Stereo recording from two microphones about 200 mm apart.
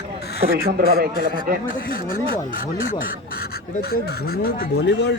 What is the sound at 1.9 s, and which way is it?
Speech, 45° left (ahead or behind).